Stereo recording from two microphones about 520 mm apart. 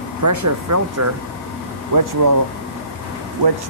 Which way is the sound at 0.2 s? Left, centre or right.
Right.